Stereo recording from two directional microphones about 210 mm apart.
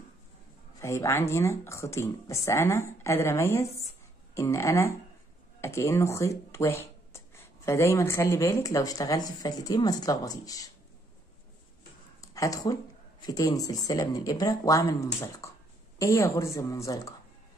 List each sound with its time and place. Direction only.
0.7 s speech: 15° left (ahead or behind)
12.2 s a sound: 15° left (ahead or behind)
13.2 s speech: 15° left (ahead or behind)